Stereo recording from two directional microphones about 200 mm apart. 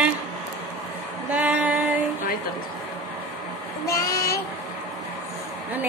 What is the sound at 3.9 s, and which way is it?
Speech, 15° left (ahead or behind).